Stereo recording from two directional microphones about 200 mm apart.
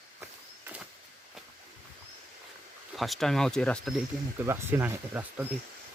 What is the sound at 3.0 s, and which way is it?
Speech, centre (ahead or behind).